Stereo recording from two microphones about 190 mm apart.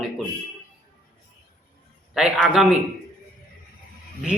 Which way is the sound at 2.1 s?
5° right (ahead or behind).